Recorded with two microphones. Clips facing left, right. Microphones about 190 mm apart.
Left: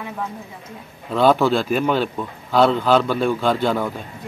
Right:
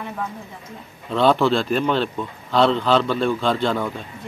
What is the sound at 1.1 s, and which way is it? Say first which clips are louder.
Speech: left 1 dB; 5° left (ahead or behind).